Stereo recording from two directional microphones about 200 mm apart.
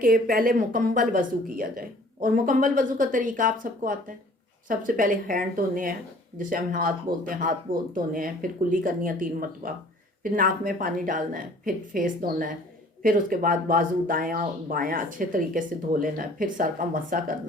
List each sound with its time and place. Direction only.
0.0 s speech: 45° right (ahead or behind)